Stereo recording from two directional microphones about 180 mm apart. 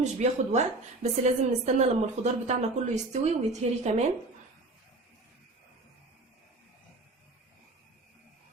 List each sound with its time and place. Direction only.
0.0 s a woman's voice: 40° right (ahead or behind)